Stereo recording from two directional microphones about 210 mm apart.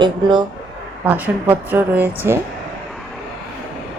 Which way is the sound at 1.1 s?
10° right (ahead or behind).